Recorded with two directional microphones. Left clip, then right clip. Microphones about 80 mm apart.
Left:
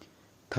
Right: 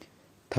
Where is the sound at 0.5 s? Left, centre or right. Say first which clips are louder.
Right 4 dB; right.